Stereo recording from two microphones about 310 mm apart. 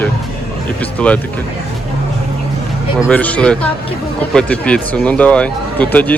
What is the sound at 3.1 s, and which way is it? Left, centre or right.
Speech, centre.